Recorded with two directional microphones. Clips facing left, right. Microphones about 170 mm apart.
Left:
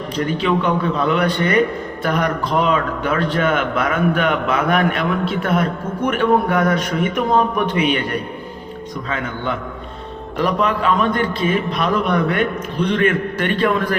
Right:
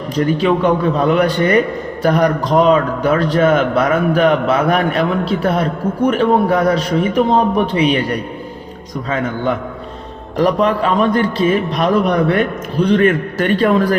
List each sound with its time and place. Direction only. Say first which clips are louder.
0.3 s a man's voice: right 3 dB; 40° right (ahead or behind)
10.3 s a man's voice: right 5 dB; 40° right (ahead or behind)